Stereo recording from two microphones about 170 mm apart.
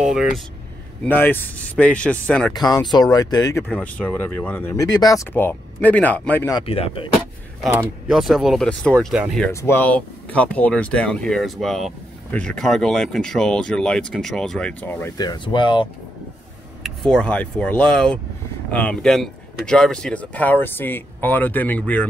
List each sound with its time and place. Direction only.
0.0 s air conditioning: centre (ahead or behind)
1.0 s speech: 10° left (ahead or behind)
2.5 s speech: 25° left (ahead or behind)
3.6 s speech: 10° left (ahead or behind)
6.5 s speech: 35° left (ahead or behind)
8.1 s speech: centre (ahead or behind)
9.5 s speech: 15° left (ahead or behind)
15.1 s speech: 25° left (ahead or behind)
16.8 s speech: 5° left (ahead or behind)